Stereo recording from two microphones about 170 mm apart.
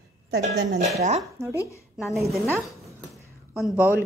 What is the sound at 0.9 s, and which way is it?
Speech, 40° right (ahead or behind).